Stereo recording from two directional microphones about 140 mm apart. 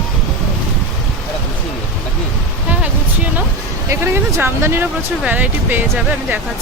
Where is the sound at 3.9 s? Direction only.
15° right (ahead or behind).